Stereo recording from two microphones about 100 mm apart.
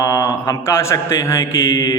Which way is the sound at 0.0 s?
35° left (ahead or behind).